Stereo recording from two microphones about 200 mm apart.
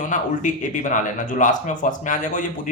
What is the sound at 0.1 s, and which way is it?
A man's voice, 40° left (ahead or behind).